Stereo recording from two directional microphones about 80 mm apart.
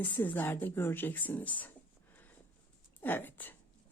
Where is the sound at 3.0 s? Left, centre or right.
Left.